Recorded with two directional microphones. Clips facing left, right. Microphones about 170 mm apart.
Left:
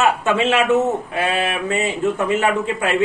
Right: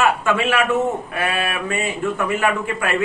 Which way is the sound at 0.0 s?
20° left (ahead or behind).